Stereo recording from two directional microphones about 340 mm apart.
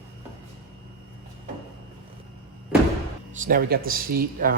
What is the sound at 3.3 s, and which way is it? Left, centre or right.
Speech, right.